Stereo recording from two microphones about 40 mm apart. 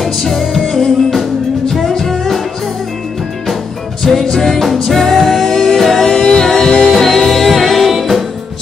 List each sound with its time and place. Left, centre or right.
0.0 s music: centre
4.0 s music: centre
5.4 s music: centre